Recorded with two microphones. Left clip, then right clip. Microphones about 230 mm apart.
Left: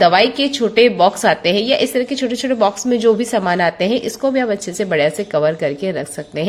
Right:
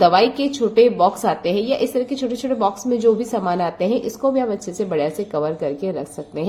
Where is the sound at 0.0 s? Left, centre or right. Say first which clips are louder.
Left 2 dB; left.